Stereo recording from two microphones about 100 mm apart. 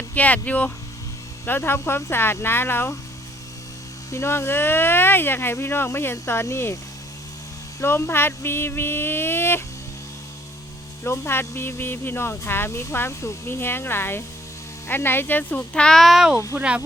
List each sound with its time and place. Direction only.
0.1 s speech: 15° left (ahead or behind)
4.1 s speech: 30° left (ahead or behind)
7.8 s speech: 25° left (ahead or behind)
11.0 s speech: 25° left (ahead or behind); by 16.8 s 10° right (ahead or behind)